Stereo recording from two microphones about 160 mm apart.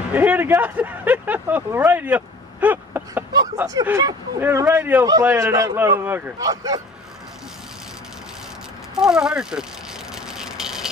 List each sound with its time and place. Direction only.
0.1 s speech: 10° right (ahead or behind)
8.9 s speech: 5° right (ahead or behind)
10.3 s a sound: 5° right (ahead or behind)